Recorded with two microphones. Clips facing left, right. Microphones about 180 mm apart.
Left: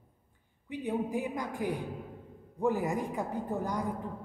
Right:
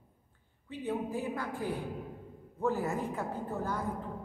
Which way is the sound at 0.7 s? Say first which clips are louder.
Left 2 dB; 15° left (ahead or behind).